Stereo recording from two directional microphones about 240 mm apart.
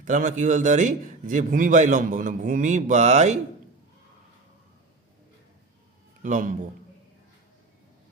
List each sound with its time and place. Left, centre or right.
0.0 s a man's voice: right
6.2 s a man's voice: right